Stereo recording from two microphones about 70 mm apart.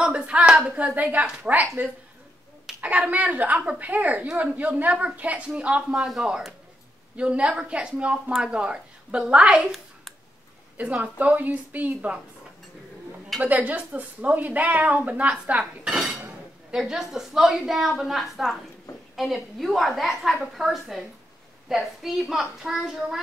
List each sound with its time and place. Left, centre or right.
0.0 s a woman's voice: centre
10.8 s a woman's voice: right
13.4 s a woman's voice: right; by 23.1 s centre